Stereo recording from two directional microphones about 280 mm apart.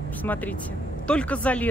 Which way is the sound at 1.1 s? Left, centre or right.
Centre.